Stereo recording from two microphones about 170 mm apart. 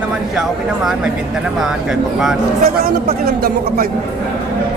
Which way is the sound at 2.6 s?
60° right (ahead or behind).